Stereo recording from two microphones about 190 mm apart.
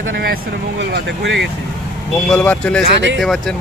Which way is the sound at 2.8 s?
65° right (ahead or behind).